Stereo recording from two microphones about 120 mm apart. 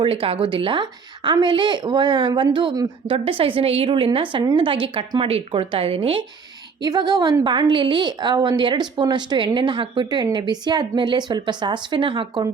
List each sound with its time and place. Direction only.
0.0 s a woman's voice: 50° right (ahead or behind)
3.1 s a woman's voice: 50° right (ahead or behind)
6.8 s a woman's voice: 35° right (ahead or behind)